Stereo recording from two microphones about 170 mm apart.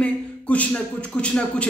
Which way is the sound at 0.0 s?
10° left (ahead or behind).